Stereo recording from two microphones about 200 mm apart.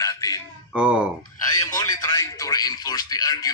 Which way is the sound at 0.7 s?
5° right (ahead or behind).